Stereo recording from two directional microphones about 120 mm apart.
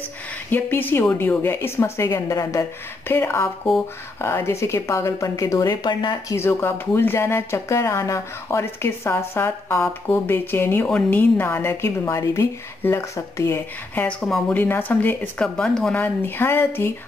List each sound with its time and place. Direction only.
0.5 s speech: 15° left (ahead or behind); by 6.1 s 40° left (ahead or behind)
6.2 s speech: 20° left (ahead or behind)
14.0 s speech: 5° left (ahead or behind)